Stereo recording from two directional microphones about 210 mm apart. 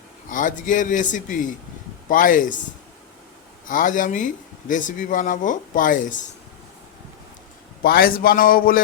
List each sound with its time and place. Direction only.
0.3 s speech: 40° left (ahead or behind)
3.7 s speech: 40° left (ahead or behind)
7.8 s a man's voice: 45° left (ahead or behind)